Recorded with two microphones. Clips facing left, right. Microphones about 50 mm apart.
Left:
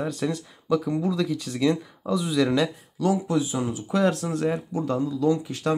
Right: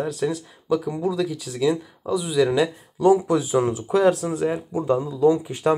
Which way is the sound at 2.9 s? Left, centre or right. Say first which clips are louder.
Right 6 dB; right.